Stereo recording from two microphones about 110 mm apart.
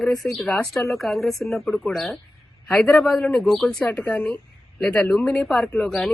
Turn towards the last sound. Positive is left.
turn(degrees=5)  # may be behind; listen again after turning